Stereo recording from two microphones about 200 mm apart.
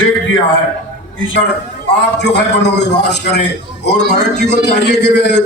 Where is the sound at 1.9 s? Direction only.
60° left (ahead or behind).